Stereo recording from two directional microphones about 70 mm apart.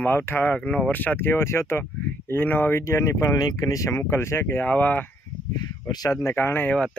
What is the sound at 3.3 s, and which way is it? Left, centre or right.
Speech, left.